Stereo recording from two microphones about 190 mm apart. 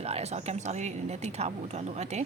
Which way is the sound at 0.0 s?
35° right (ahead or behind).